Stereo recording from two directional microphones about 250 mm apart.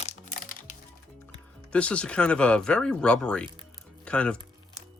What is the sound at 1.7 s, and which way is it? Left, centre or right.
Speech, centre.